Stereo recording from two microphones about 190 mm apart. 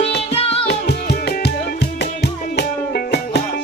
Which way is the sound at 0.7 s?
60° left (ahead or behind).